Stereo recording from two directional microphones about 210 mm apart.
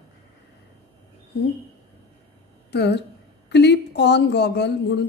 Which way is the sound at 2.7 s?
55° left (ahead or behind).